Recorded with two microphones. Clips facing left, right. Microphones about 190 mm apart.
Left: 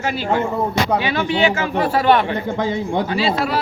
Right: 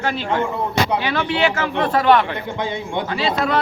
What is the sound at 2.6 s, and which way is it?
Speech, 40° left (ahead or behind).